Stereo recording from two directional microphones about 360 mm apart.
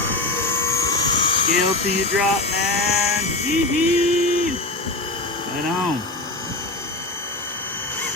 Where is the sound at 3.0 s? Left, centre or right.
Centre.